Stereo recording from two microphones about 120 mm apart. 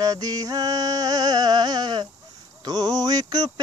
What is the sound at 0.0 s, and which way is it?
Music, 30° right (ahead or behind).